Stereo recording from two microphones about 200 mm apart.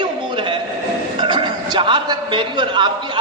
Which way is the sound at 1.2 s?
25° right (ahead or behind).